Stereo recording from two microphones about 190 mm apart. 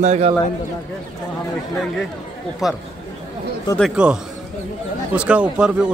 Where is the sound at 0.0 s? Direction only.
35° right (ahead or behind).